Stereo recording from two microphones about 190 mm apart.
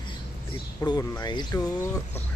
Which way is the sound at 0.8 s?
15° left (ahead or behind).